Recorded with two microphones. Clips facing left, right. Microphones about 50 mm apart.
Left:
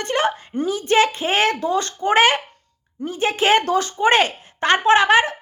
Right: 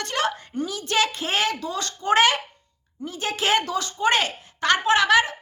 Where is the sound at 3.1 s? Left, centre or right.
Left.